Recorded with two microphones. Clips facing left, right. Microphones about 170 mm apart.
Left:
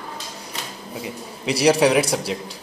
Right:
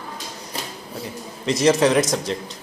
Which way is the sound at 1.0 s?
10° left (ahead or behind).